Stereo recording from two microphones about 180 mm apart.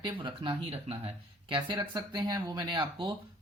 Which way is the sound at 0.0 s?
25° right (ahead or behind).